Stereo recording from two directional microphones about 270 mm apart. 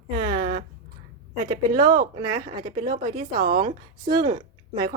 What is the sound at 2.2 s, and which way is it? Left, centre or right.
A woman's voice, right.